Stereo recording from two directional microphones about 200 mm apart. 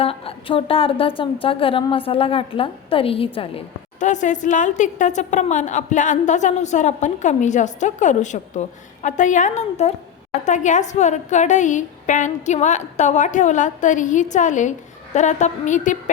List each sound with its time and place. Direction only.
0.0 s a woman's voice: 30° left (ahead or behind)
4.0 s a woman's voice: 40° left (ahead or behind)